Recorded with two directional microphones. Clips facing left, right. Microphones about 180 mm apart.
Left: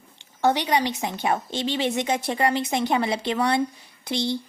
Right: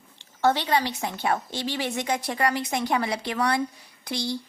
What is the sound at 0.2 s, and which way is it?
Speech, 15° left (ahead or behind).